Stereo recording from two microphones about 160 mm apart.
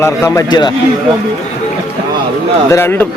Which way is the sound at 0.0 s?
20° left (ahead or behind).